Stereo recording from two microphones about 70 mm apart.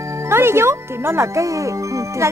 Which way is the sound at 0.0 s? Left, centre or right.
Right.